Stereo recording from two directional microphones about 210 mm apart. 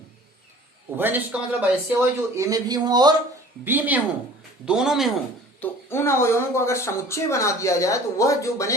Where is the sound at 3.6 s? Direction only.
10° right (ahead or behind).